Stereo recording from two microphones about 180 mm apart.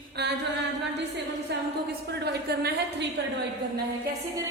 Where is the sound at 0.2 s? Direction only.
65° right (ahead or behind).